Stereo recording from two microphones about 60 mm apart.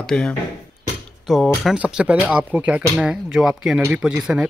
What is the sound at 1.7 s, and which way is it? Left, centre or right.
Speech, centre.